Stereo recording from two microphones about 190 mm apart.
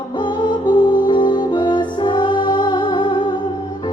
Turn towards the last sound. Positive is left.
turn(degrees=25)  # may be behind; listen again after turning